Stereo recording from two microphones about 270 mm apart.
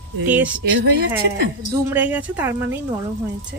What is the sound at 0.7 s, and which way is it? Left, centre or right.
Speech, right.